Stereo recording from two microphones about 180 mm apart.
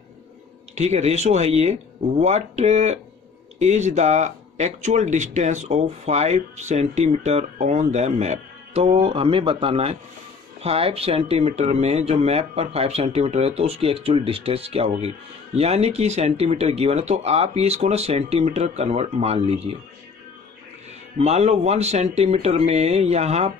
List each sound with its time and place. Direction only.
0.7 s speech: 35° right (ahead or behind)
21.2 s speech: 35° right (ahead or behind)